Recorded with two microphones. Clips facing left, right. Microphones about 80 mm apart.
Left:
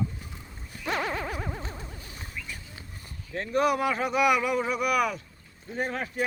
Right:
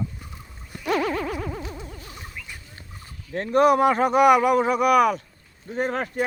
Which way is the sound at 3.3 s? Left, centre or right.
Right.